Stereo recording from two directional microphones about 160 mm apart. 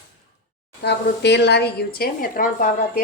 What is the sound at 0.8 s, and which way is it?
Speech, 90° left.